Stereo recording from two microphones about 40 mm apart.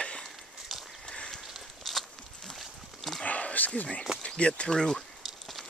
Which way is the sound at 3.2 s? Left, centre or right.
Left.